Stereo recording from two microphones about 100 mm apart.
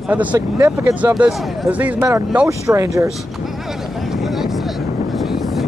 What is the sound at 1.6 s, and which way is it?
Speech, 15° right (ahead or behind).